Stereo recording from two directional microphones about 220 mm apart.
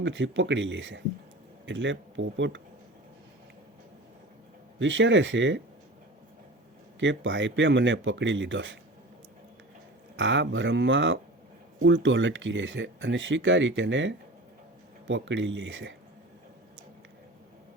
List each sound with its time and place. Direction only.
0.0 s speech: 55° right (ahead or behind)
4.8 s speech: 55° right (ahead or behind)
7.0 s speech: 55° right (ahead or behind)
10.2 s speech: 55° right (ahead or behind)